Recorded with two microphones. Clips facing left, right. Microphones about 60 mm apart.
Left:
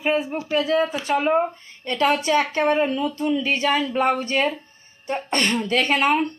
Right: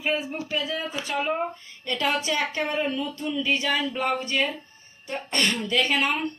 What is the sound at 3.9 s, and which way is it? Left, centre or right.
Speech, left.